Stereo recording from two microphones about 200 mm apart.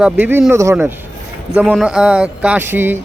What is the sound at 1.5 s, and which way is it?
Speech, centre (ahead or behind).